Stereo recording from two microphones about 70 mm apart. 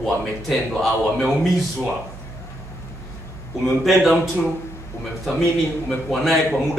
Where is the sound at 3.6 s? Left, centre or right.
Centre.